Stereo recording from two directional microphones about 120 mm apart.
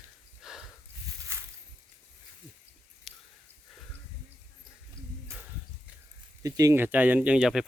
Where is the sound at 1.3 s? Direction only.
20° right (ahead or behind).